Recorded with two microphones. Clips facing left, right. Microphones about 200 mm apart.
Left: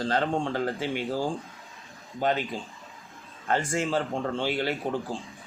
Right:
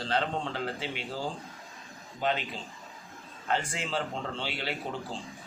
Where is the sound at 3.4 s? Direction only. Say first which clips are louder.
Left 5 dB; 50° left (ahead or behind).